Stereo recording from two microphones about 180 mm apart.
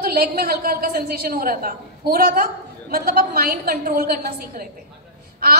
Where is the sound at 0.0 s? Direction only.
55° right (ahead or behind).